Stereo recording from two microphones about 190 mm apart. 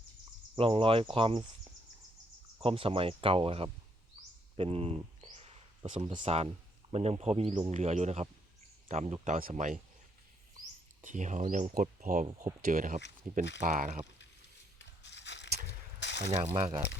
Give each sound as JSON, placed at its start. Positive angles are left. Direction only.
{"t": 0.5, "sound": "speech", "side_deg": -30}
{"t": 2.6, "sound": "speech", "side_deg": -30}
{"t": 4.5, "sound": "a sound", "side_deg": -30}
{"t": 6.9, "sound": "speech", "side_deg": -35}
{"t": 11.0, "sound": "speech", "side_deg": -40}
{"t": 15.0, "sound": "a sound", "side_deg": 65}
{"t": 16.6, "sound": "speech", "side_deg": -30}